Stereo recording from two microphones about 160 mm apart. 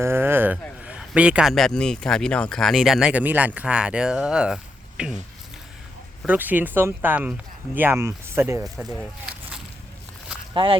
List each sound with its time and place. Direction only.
0.0 s a sound: 15° right (ahead or behind)
0.9 s speech: 5° right (ahead or behind)
6.2 s speech: 10° right (ahead or behind)
8.6 s speech: centre (ahead or behind)
10.5 s speech: 30° right (ahead or behind)